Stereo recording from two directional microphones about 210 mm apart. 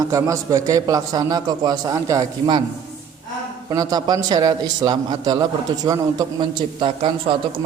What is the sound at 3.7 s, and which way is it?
A man's voice, 20° right (ahead or behind).